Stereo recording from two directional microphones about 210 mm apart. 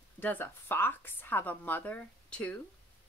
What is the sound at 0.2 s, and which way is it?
A woman's voice, 10° left (ahead or behind).